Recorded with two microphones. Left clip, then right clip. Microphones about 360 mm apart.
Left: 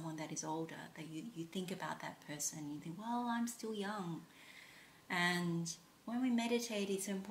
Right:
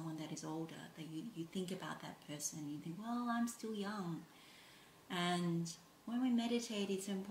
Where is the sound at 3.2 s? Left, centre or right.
Centre.